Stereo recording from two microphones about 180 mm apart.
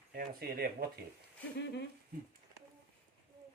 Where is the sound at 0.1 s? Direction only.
55° right (ahead or behind).